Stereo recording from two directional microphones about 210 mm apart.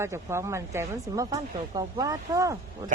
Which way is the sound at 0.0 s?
10° right (ahead or behind).